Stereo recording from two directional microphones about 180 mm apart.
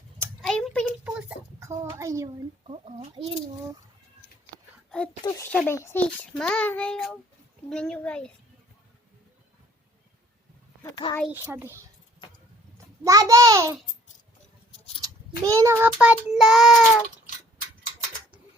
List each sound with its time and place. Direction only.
0.4 s a sound: 5° left (ahead or behind)
1.5 s a sound: 15° right (ahead or behind)
2.6 s speech: 30° right (ahead or behind)
5.2 s a child's voice: 20° left (ahead or behind)
10.9 s speech: 20° left (ahead or behind)
11.3 s a child's voice: 15° right (ahead or behind)
13.1 s a child's voice: 20° right (ahead or behind)
15.0 s a child's voice: 20° right (ahead or behind)
15.9 s a child's voice: 5° right (ahead or behind)